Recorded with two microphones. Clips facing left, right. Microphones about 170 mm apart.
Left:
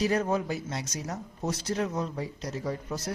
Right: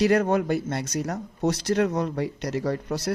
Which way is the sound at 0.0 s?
70° right (ahead or behind).